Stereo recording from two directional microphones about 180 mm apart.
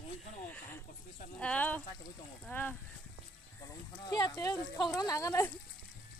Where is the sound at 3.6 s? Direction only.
20° left (ahead or behind).